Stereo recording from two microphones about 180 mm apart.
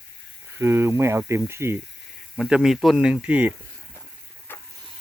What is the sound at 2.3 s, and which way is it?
Speech, 5° right (ahead or behind).